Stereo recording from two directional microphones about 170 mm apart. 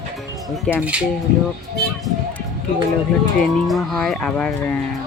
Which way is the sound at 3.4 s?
Centre (ahead or behind).